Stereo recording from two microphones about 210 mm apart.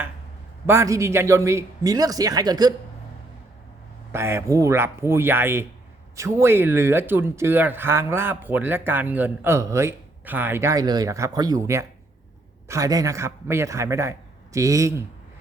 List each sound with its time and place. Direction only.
0.7 s speech: 15° right (ahead or behind)
4.1 s speech: 10° right (ahead or behind)